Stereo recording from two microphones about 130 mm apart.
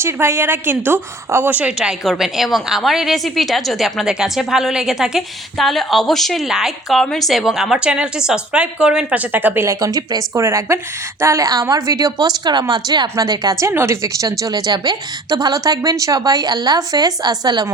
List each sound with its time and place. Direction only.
0.0 s a woman's voice: 20° right (ahead or behind)